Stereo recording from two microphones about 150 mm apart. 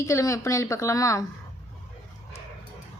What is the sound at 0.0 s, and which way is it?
A woman's voice, 20° left (ahead or behind).